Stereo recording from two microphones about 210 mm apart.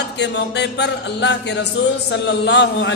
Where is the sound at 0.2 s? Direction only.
55° left (ahead or behind).